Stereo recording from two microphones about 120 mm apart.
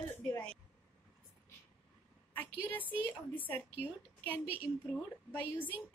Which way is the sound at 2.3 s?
15° left (ahead or behind).